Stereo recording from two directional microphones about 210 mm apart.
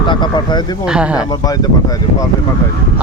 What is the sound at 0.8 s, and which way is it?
Speech, 5° right (ahead or behind).